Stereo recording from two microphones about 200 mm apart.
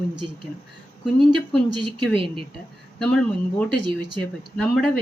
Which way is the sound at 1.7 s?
25° right (ahead or behind).